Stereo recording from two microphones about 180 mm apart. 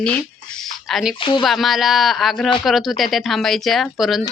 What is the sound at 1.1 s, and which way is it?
Speech, 30° left (ahead or behind).